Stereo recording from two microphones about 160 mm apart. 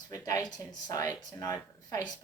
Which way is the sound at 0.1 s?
25° left (ahead or behind).